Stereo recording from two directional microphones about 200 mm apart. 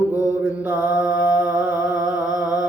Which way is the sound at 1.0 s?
10° right (ahead or behind).